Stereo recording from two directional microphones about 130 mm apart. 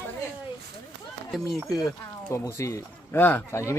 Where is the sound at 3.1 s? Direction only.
15° left (ahead or behind).